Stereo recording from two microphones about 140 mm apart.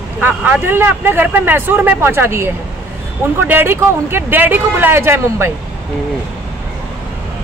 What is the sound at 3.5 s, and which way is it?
Speech, 15° right (ahead or behind).